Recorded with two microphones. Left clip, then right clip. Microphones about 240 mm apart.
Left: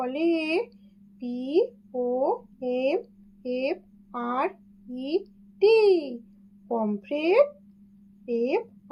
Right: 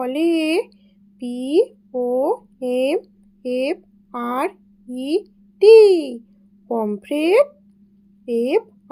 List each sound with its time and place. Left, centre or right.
0.0 s speech: right